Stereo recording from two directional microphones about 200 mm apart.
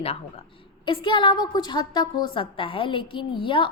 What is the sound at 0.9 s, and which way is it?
A woman's voice, 25° left (ahead or behind).